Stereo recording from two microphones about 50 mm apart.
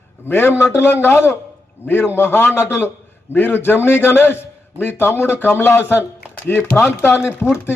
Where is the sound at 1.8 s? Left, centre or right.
Left.